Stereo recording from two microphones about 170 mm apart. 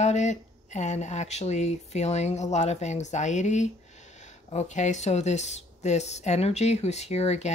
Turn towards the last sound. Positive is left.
turn(degrees=40)  # may be behind; listen again after turning